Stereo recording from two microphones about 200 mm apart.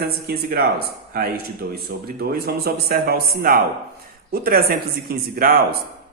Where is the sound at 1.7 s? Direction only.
50° right (ahead or behind).